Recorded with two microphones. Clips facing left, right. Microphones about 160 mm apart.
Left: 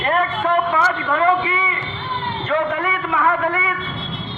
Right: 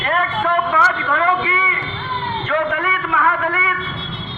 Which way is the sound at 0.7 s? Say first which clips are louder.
Even; 20° left (ahead or behind).